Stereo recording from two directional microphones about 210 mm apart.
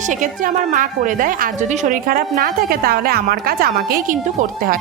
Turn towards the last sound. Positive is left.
turn(degrees=-45)  # may be behind; listen again after turning